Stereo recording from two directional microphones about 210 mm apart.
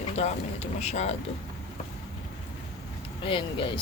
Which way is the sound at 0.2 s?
30° left (ahead or behind).